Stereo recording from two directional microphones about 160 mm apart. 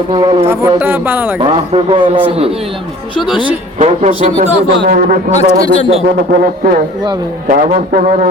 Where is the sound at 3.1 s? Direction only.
30° left (ahead or behind).